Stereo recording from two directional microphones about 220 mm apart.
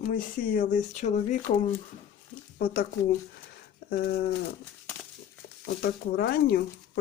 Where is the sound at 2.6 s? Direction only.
45° left (ahead or behind).